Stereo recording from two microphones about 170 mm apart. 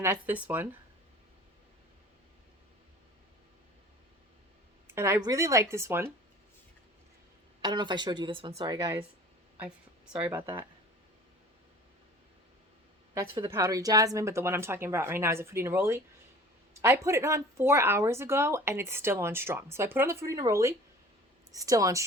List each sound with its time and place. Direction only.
0.0 s speech: 15° right (ahead or behind)
4.9 s speech: 15° right (ahead or behind)
7.6 s a woman's voice: 25° right (ahead or behind)
9.6 s a woman's voice: 5° right (ahead or behind)
13.1 s a woman's voice: 25° right (ahead or behind)